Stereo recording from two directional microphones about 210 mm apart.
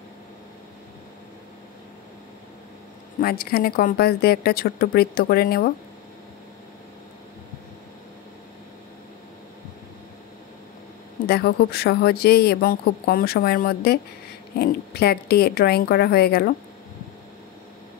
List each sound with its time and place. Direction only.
3.2 s speech: 45° left (ahead or behind)
11.2 s speech: 50° left (ahead or behind)